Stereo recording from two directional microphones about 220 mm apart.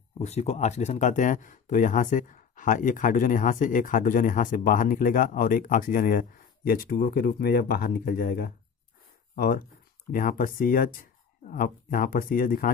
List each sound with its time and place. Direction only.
0.2 s speech: 30° left (ahead or behind)